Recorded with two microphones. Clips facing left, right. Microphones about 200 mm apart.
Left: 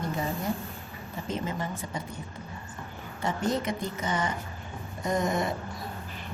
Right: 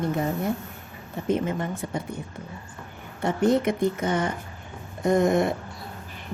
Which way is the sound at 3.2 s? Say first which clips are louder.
Right 7 dB; 60° right (ahead or behind).